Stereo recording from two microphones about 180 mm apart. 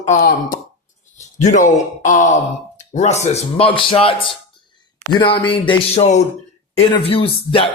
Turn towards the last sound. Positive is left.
turn(degrees=30)  # may be behind; listen again after turning